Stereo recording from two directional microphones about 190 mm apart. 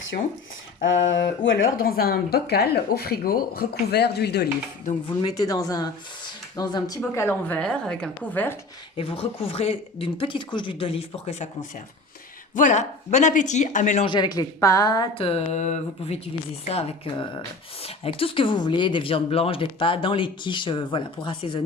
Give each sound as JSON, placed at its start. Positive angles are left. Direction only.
{"t": 0.8, "sound": "a sound", "side_deg": 75}
{"t": 1.5, "sound": "speech", "side_deg": 90}
{"t": 1.7, "sound": "speech", "side_deg": 50}
{"t": 5.2, "sound": "a woman's voice", "side_deg": 20}
{"t": 9.0, "sound": "speech", "side_deg": 30}
{"t": 12.5, "sound": "speech", "side_deg": 40}
{"t": 14.1, "sound": "speech", "side_deg": 20}